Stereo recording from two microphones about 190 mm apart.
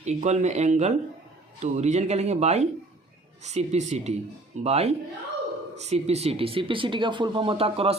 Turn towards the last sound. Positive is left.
turn(degrees=-30)  # may be behind; listen again after turning